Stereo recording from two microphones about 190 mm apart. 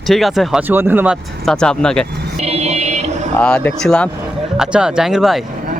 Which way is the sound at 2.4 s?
35° right (ahead or behind).